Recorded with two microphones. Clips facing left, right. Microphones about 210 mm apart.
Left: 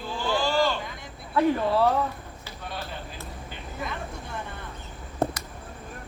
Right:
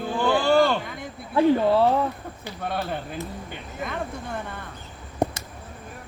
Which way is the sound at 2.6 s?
55° right (ahead or behind).